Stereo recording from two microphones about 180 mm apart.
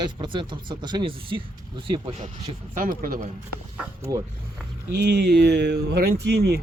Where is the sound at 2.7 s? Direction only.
50° right (ahead or behind).